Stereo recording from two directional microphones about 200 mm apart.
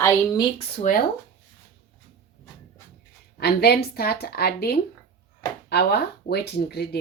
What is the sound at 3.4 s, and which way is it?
Speech, 55° left (ahead or behind).